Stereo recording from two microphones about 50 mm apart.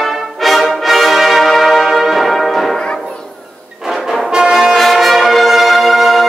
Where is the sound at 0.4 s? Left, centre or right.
Centre.